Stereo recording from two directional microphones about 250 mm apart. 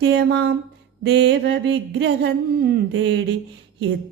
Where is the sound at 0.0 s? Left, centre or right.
Right.